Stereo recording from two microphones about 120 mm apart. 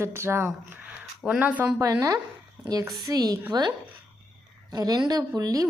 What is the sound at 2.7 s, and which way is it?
Speech, 30° right (ahead or behind).